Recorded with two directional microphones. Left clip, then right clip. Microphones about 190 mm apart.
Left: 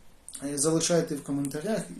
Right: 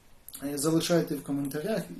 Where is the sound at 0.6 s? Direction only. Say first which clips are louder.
Left 1 dB; 5° left (ahead or behind).